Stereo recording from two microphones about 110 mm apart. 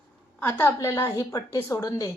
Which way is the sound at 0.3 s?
20° left (ahead or behind).